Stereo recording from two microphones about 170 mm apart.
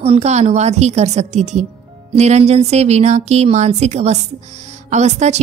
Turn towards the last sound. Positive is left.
turn(degrees=-40)  # may be behind; listen again after turning